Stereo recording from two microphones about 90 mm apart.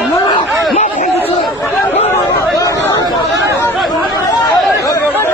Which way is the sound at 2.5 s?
45° left (ahead or behind).